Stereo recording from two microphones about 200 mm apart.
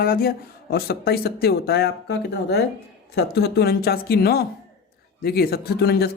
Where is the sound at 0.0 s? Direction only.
50° left (ahead or behind).